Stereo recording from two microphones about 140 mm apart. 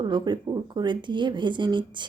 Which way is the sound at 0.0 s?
35° right (ahead or behind).